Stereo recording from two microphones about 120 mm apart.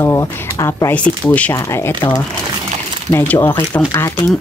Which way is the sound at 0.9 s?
10° left (ahead or behind).